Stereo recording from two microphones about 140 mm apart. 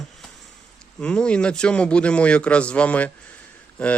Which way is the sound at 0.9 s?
5° left (ahead or behind).